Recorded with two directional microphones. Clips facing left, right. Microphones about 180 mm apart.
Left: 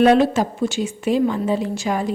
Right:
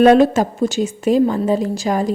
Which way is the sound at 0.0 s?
45° right (ahead or behind).